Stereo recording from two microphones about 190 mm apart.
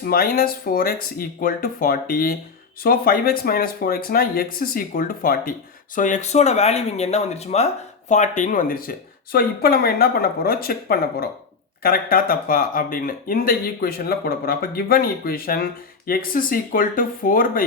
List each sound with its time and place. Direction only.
0.0 s speech: 50° left (ahead or behind)